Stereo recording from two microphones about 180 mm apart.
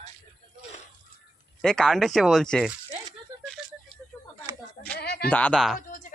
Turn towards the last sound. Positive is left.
turn(degrees=0)  # may be behind; listen again after turning